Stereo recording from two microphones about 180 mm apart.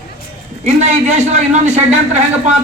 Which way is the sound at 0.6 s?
40° right (ahead or behind).